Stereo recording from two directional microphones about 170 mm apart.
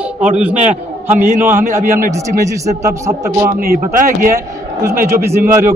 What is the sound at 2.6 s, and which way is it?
Speech, 20° right (ahead or behind).